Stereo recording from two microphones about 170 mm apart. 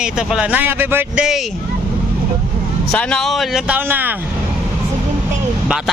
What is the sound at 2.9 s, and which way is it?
Speech, 5° left (ahead or behind).